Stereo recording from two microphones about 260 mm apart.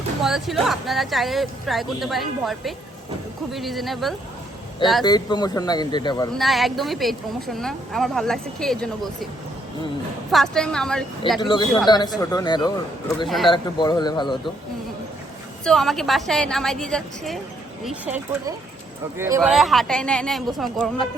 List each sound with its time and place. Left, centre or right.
0.2 s a woman's voice: centre
5.0 s speech: centre
6.4 s a woman's voice: centre
10.3 s a woman's voice: centre
11.3 s speech: centre
13.2 s a woman's voice: centre
13.5 s speech: centre
15.6 s a woman's voice: centre